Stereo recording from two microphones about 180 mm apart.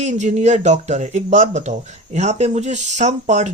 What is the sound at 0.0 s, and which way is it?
Speech, 40° right (ahead or behind).